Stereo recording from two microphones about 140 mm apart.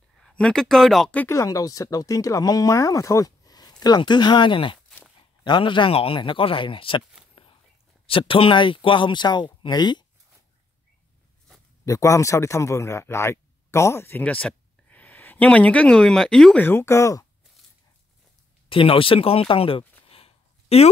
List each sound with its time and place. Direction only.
0.2 s speech: 5° left (ahead or behind)
1.2 s speech: 20° left (ahead or behind)
4.8 s a sound: 5° left (ahead or behind)
5.4 s speech: 35° left (ahead or behind)
7.4 s whispering: 40° left (ahead or behind)
8.1 s speech: 40° left (ahead or behind)
11.8 s speech: 20° left (ahead or behind); by 16.6 s 5° left (ahead or behind)
16.6 s speech: 15° left (ahead or behind)
18.7 s speech: 40° left (ahead or behind)
20.0 s a sound: 40° left (ahead or behind)